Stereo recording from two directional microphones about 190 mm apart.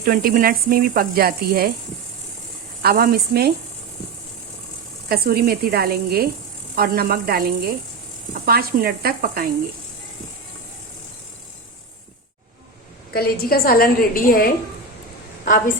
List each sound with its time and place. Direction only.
0.0 s speech: 50° right (ahead or behind)
2.8 s speech: 50° right (ahead or behind)
5.0 s speech: 55° right (ahead or behind)
13.1 s a woman's voice: 55° left (ahead or behind)